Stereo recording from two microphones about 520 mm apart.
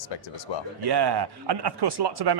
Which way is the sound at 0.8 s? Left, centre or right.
Right.